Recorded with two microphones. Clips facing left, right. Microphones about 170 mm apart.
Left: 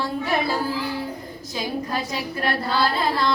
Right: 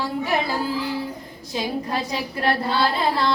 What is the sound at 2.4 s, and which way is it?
Female singing, 30° right (ahead or behind).